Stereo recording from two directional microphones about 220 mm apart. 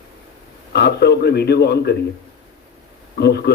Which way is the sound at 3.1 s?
50° left (ahead or behind).